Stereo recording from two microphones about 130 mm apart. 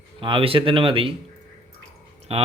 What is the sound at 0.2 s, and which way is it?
Speech, 45° right (ahead or behind).